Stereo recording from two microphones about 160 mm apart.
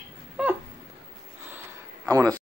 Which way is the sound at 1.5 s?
20° right (ahead or behind).